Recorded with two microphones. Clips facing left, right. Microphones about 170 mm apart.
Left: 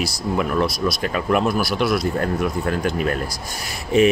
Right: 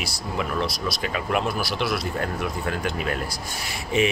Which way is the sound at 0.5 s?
50° left (ahead or behind).